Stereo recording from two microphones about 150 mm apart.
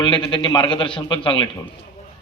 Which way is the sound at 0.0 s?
35° left (ahead or behind).